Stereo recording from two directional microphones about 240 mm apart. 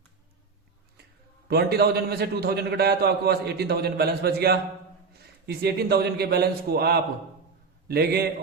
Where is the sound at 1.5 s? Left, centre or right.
Right.